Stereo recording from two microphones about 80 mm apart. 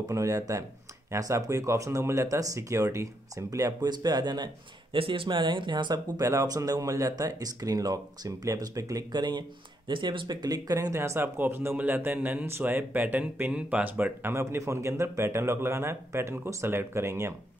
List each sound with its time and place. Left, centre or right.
0.1 s speech: right
5.0 s speech: right
6.1 s speech: right
9.8 s speech: right
11.0 s speech: right
14.3 s speech: right